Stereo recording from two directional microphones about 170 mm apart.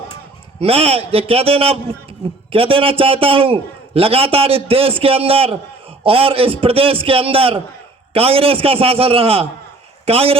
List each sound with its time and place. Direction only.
0.6 s a man's voice: 35° right (ahead or behind)